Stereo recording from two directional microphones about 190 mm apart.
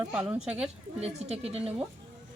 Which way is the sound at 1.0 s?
35° right (ahead or behind).